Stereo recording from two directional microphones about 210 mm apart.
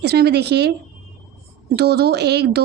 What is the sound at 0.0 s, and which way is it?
Speech, 50° right (ahead or behind).